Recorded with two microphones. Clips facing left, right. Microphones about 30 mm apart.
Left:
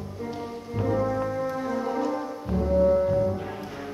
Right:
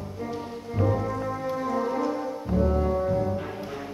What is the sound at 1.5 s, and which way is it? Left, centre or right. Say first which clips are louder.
Music: right 1 dB; centre.